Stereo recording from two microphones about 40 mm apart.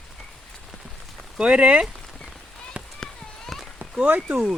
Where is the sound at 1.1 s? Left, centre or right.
Right.